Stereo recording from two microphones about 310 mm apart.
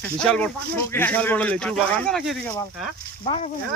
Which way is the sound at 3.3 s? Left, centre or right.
Left.